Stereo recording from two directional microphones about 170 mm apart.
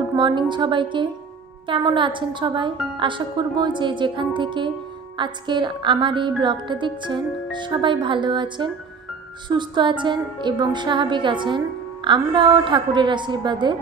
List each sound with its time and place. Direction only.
0.1 s a woman's voice: 25° right (ahead or behind)